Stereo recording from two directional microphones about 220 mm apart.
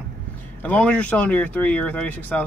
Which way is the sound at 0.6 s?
5° left (ahead or behind).